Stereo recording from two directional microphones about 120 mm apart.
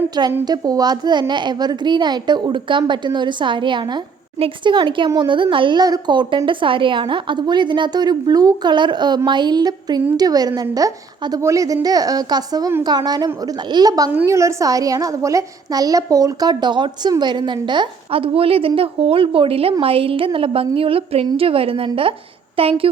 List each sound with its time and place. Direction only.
0.4 s a woman's voice: 35° right (ahead or behind); by 22.9 s 50° right (ahead or behind)